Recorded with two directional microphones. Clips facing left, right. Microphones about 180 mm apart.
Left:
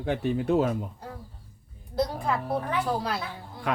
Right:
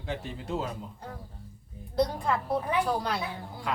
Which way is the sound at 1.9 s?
Centre (ahead or behind).